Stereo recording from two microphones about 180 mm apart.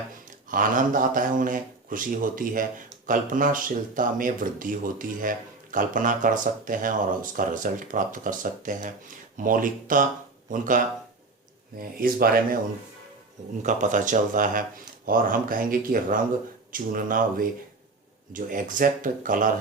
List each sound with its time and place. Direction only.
0.3 s speech: 50° right (ahead or behind)
13.6 s speech: 45° right (ahead or behind)